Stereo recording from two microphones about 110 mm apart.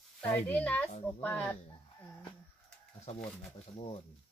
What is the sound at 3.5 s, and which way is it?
Speech, 75° left (ahead or behind).